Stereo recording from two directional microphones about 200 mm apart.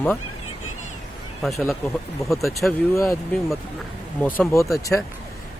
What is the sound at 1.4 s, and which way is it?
Speech, centre (ahead or behind).